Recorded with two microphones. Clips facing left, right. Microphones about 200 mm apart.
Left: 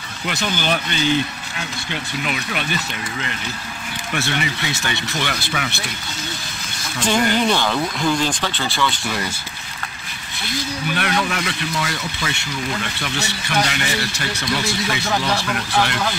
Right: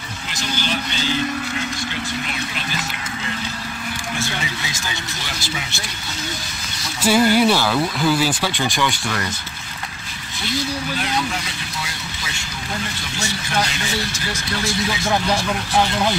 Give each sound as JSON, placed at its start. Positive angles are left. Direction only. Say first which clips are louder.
{"t": 0.3, "sound": "speech", "louder": "left 4 dB", "side_deg": 55}
{"t": 4.1, "sound": "speech", "louder": "left 5 dB", "side_deg": 65}
{"t": 7.0, "sound": "speech", "louder": "right 3 dB", "side_deg": -10}
{"t": 11.0, "sound": "speech", "louder": "left 2 dB", "side_deg": 65}
{"t": 13.0, "sound": "speech", "louder": "left 2 dB", "side_deg": 65}